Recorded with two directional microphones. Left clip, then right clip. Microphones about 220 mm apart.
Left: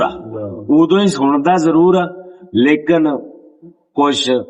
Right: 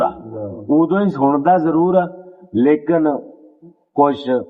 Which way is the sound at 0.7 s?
20° left (ahead or behind).